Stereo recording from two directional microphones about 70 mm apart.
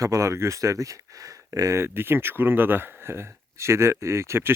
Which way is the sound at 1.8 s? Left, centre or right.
Right.